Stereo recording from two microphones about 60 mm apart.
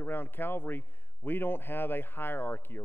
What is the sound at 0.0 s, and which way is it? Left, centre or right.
A man's voice, left.